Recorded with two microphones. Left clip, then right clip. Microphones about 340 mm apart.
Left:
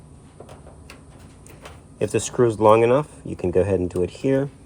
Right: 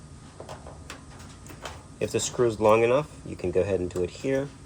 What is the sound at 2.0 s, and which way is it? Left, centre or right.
Speech, left.